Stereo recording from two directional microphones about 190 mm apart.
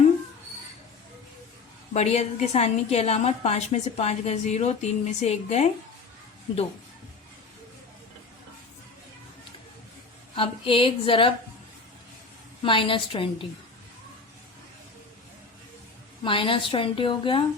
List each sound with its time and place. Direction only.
1.9 s a woman's voice: 35° left (ahead or behind)
10.3 s a woman's voice: 30° left (ahead or behind)
12.6 s a woman's voice: 25° left (ahead or behind)
16.2 s a woman's voice: 25° left (ahead or behind)